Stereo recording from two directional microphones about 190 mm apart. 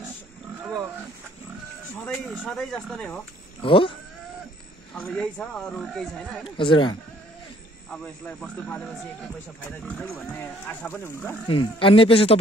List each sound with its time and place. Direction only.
0.6 s pig: 10° right (ahead or behind)
2.0 s speech: 5° left (ahead or behind)
3.6 s speech: 25° left (ahead or behind)
4.9 s speech: 5° left (ahead or behind)
6.5 s speech: 25° left (ahead or behind)
7.9 s speech: 5° left (ahead or behind)
11.4 s speech: 25° left (ahead or behind)